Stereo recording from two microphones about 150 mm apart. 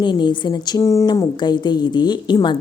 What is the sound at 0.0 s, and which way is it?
A woman's voice, 30° left (ahead or behind).